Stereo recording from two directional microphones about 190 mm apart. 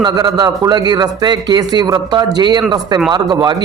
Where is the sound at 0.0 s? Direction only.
20° right (ahead or behind).